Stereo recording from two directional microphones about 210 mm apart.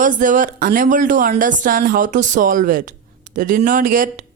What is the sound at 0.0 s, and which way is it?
Speech, 40° right (ahead or behind).